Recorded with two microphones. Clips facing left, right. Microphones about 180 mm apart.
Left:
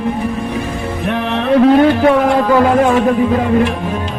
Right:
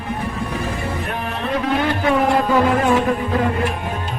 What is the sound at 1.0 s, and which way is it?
Music, 90° left.